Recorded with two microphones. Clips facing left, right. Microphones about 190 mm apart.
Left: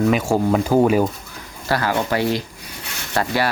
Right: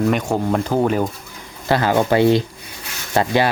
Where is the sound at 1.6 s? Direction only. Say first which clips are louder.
Right 4 dB; 20° right (ahead or behind).